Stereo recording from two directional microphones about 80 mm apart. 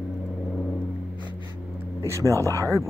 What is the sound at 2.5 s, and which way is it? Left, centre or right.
Speech, right.